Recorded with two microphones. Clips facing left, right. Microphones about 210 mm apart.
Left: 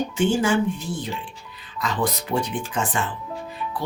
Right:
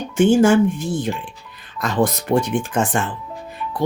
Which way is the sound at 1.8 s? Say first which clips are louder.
Right 6 dB; 45° right (ahead or behind).